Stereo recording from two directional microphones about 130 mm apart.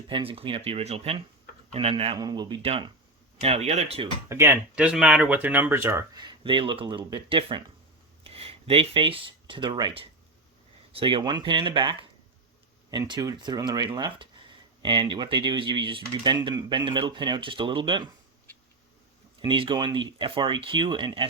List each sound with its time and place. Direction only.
0.1 s speech: 45° right (ahead or behind)
2.1 s speech: 30° right (ahead or behind)
3.4 s speech: 55° right (ahead or behind)
4.3 s speech: 20° right (ahead or behind)
4.7 s speech: 10° right (ahead or behind)
6.1 s speech: 35° right (ahead or behind)
19.4 s speech: 40° right (ahead or behind)